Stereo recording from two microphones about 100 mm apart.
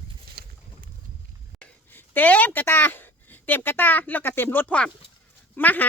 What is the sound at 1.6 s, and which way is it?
Speech, 20° left (ahead or behind).